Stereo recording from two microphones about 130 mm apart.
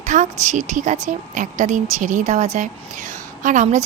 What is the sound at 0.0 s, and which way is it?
A woman's voice, 65° right (ahead or behind).